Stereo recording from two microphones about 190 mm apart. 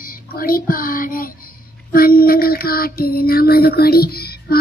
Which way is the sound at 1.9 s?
50° left (ahead or behind).